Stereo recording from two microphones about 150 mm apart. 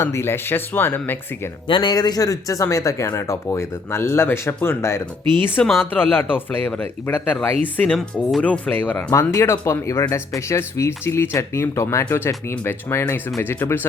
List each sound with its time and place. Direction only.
0.0 s speech: 15° left (ahead or behind)
1.6 s speech: 30° left (ahead or behind); by 13.8 s 15° left (ahead or behind)